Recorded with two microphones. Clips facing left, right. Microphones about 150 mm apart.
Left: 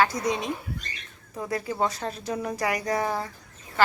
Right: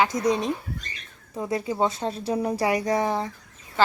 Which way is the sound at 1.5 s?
20° right (ahead or behind).